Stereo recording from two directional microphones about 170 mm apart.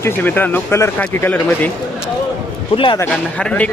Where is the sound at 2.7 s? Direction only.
30° left (ahead or behind).